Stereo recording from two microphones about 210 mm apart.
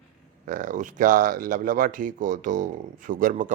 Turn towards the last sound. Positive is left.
turn(degrees=-35)  # may be behind; listen again after turning